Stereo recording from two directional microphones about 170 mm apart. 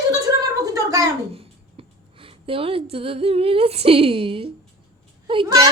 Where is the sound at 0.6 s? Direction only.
20° right (ahead or behind).